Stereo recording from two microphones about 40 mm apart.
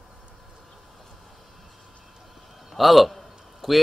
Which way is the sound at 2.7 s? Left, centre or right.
Centre.